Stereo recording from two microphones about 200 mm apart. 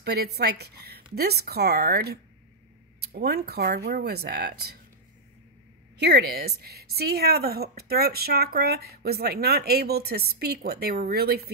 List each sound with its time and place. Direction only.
0.0 s a woman's voice: 55° right (ahead or behind)
5.9 s a woman's voice: 55° right (ahead or behind)